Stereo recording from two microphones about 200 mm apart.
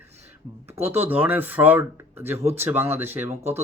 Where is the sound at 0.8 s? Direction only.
30° right (ahead or behind).